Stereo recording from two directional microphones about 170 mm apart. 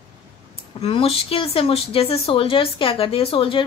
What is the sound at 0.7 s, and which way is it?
Speech, 35° left (ahead or behind).